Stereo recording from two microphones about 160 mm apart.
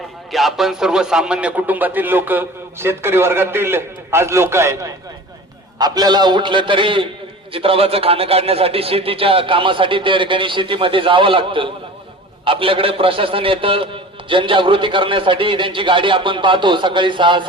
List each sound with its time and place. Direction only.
0.3 s a man's voice: centre (ahead or behind); by 17.4 s 30° right (ahead or behind)